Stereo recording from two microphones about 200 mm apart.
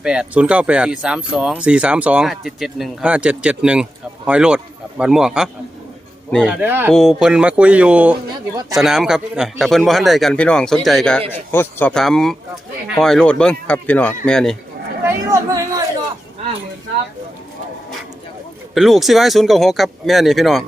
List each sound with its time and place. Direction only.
0.0 s speech: 5° right (ahead or behind)
6.6 s speech: 10° right (ahead or behind)
15.0 s speech: 15° right (ahead or behind)
18.7 s speech: centre (ahead or behind)